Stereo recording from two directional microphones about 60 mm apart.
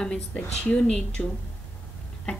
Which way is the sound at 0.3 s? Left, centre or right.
Centre.